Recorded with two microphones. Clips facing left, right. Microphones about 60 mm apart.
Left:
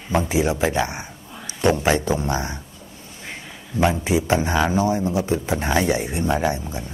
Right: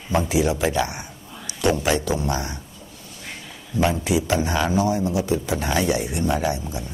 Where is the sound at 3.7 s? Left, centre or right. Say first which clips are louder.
Left 1 dB; left.